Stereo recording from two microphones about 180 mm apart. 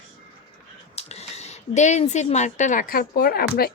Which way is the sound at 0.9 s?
35° left (ahead or behind).